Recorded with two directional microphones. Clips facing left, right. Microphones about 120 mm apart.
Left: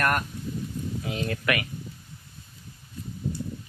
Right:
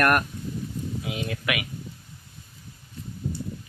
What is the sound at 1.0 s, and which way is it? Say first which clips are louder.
Speech: left 3 dB; 10° right (ahead or behind).